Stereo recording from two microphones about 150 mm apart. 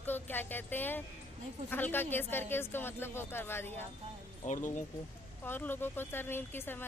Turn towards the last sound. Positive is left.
turn(degrees=15)  # may be behind; listen again after turning